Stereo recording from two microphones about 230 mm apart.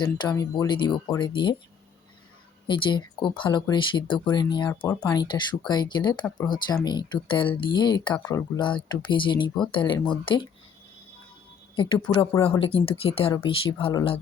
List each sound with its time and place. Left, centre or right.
0.0 s speech: centre
2.6 s speech: left
11.8 s speech: centre